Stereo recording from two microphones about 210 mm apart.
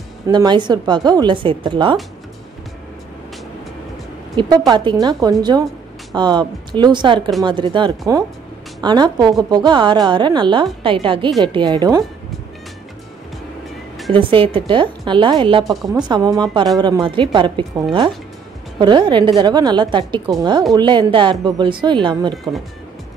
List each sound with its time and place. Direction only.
0.3 s a woman's voice: 20° right (ahead or behind)
4.4 s a woman's voice: 20° right (ahead or behind)
14.1 s a woman's voice: 25° right (ahead or behind)
15.6 s a woman's voice: centre (ahead or behind)
16.1 s a woman's voice: 20° right (ahead or behind)